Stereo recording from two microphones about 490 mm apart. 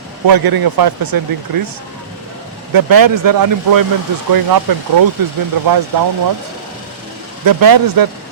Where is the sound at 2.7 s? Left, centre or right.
Right.